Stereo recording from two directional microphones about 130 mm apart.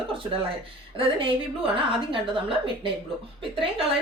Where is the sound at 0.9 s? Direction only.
40° right (ahead or behind).